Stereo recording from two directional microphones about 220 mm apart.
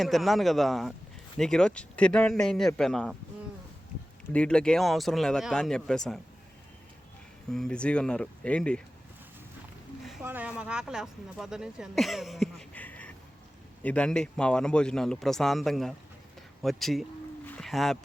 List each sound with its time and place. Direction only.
0.0 s speech: centre (ahead or behind)
4.3 s speech: 5° left (ahead or behind)
7.5 s speech: 5° left (ahead or behind)
10.1 s speech: 5° right (ahead or behind)
16.6 s a sound: centre (ahead or behind)